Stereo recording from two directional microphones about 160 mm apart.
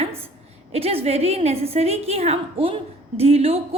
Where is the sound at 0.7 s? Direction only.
40° right (ahead or behind).